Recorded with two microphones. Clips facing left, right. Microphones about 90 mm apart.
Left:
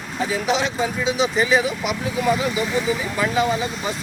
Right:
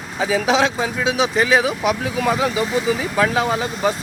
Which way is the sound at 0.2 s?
90° right.